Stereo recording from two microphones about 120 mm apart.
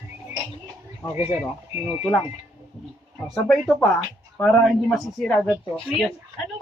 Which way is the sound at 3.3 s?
5° left (ahead or behind).